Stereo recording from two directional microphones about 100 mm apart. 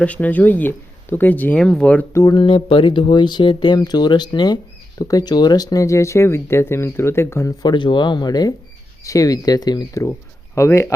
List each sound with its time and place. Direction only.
0.0 s speech: 15° left (ahead or behind)
2.3 s speech: 55° left (ahead or behind); by 7.5 s 25° left (ahead or behind)
7.6 s speech: 50° left (ahead or behind)
10.0 s speech: 30° left (ahead or behind)